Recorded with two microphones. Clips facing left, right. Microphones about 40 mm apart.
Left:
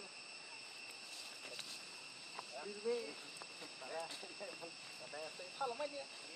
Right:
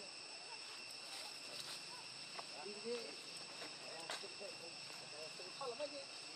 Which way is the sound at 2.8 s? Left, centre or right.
Left.